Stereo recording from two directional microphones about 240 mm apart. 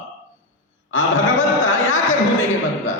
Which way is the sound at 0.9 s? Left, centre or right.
Left.